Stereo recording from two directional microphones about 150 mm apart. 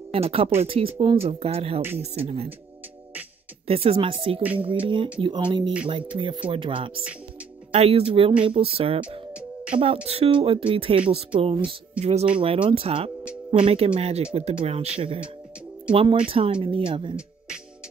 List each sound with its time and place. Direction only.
0.1 s speech: 40° right (ahead or behind)
3.6 s speech: 40° right (ahead or behind)
9.3 s music: 10° right (ahead or behind)
10.0 s speech: 40° right (ahead or behind)
12.4 s speech: 35° right (ahead or behind)